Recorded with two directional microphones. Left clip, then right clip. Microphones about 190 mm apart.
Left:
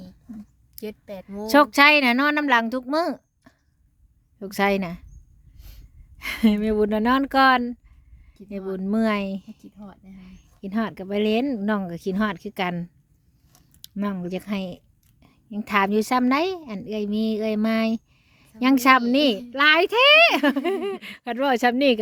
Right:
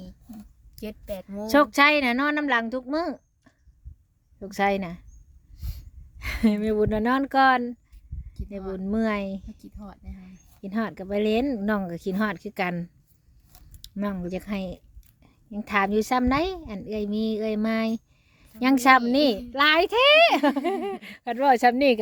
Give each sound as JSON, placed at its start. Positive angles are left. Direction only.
{"t": 0.8, "sound": "speech", "side_deg": 10}
{"t": 1.5, "sound": "speech", "side_deg": 25}
{"t": 5.5, "sound": "a sound", "side_deg": -15}
{"t": 6.1, "sound": "speech", "side_deg": 20}
{"t": 8.4, "sound": "speech", "side_deg": -15}
{"t": 8.7, "sound": "speech", "side_deg": 25}
{"t": 9.6, "sound": "speech", "side_deg": -15}
{"t": 10.2, "sound": "speech", "side_deg": 20}